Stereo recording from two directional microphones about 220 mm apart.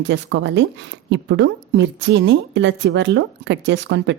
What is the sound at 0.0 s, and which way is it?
A woman's voice, 55° right (ahead or behind).